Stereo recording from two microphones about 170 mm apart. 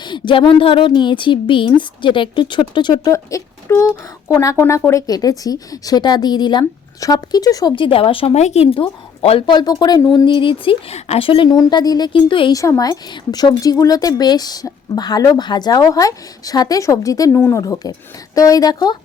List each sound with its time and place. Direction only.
0.0 s a woman's voice: 25° left (ahead or behind)